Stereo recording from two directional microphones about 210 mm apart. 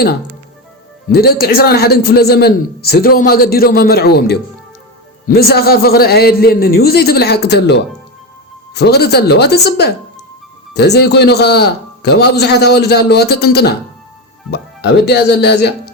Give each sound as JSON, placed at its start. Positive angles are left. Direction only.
{"t": 1.1, "sound": "a man's voice", "side_deg": 45}